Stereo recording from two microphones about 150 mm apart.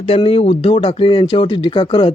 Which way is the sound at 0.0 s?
40° left (ahead or behind).